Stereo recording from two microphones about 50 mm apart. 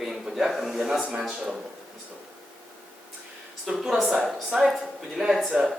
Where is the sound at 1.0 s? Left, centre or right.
Centre.